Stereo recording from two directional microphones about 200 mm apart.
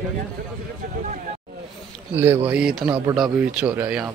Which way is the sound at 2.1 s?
10° right (ahead or behind).